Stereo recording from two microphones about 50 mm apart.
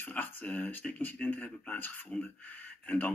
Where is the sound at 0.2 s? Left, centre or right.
Left.